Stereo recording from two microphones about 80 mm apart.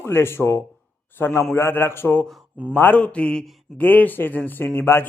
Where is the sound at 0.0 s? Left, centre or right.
Left.